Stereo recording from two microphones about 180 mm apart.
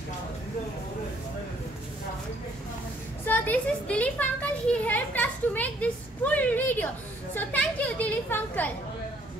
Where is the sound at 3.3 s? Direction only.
10° left (ahead or behind).